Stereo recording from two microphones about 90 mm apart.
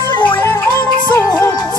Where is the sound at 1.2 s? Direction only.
30° left (ahead or behind).